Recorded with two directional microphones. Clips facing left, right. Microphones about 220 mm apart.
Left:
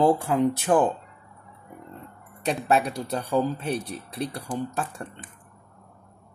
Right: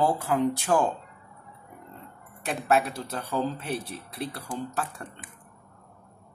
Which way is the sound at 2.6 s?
20° left (ahead or behind).